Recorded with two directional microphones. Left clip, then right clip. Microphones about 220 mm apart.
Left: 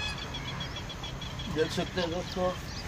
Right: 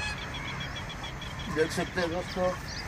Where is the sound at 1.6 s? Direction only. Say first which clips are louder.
Right 2 dB; 15° left (ahead or behind).